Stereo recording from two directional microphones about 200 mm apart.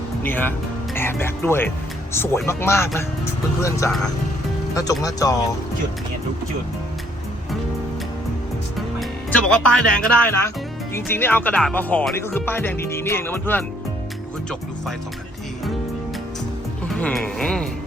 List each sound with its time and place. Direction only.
0.2 s speech: 10° left (ahead or behind)
9.0 s speech: 5° left (ahead or behind)
16.9 s speech: 5° left (ahead or behind)